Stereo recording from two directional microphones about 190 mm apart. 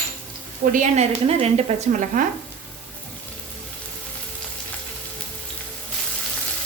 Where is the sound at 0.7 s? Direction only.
40° right (ahead or behind).